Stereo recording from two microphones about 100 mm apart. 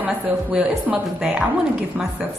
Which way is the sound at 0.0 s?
10° right (ahead or behind).